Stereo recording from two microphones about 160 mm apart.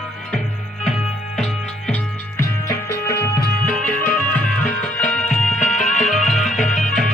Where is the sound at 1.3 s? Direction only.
Centre (ahead or behind).